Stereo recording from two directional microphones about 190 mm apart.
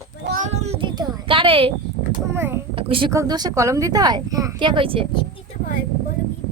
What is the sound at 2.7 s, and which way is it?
A woman's voice, 30° right (ahead or behind).